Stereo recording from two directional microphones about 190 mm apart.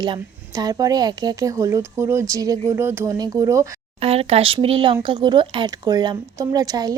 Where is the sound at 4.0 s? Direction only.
30° right (ahead or behind).